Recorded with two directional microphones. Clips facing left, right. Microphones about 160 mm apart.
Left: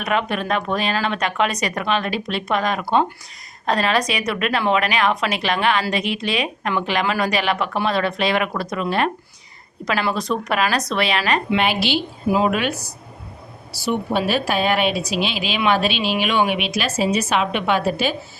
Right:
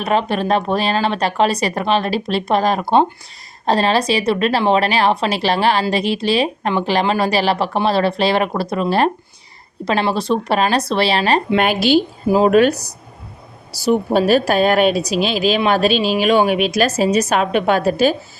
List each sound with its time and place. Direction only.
0.0 s a woman's voice: 30° right (ahead or behind)
11.6 s a woman's voice: 45° right (ahead or behind)